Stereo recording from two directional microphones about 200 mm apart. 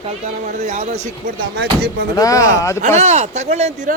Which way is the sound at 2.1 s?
15° left (ahead or behind).